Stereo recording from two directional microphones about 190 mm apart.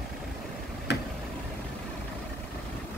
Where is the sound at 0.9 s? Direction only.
65° left (ahead or behind).